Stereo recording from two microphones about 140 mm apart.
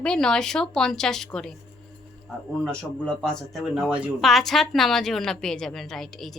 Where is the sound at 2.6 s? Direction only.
5° left (ahead or behind).